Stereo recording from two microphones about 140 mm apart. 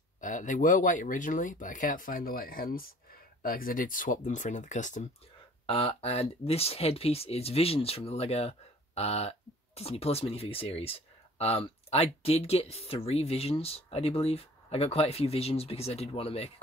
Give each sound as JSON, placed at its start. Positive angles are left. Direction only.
{"t": 0.2, "sound": "speech", "side_deg": 65}
{"t": 5.7, "sound": "speech", "side_deg": 40}